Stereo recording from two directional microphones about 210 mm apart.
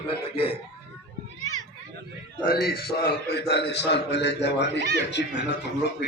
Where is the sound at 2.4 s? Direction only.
45° left (ahead or behind).